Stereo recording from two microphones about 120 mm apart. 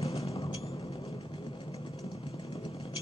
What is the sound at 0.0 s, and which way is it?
Music, 55° left (ahead or behind).